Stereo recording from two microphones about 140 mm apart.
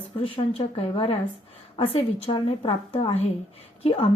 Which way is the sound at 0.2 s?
40° left (ahead or behind).